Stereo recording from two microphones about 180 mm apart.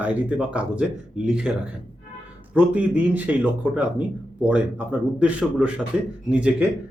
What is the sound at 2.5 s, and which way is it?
Speech, 10° right (ahead or behind).